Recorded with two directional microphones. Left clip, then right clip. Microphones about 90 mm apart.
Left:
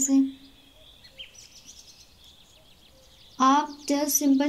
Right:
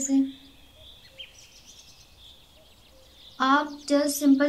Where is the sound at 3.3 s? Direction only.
25° left (ahead or behind).